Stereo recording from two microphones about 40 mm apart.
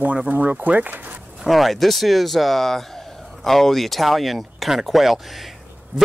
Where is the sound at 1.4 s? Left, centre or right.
Centre.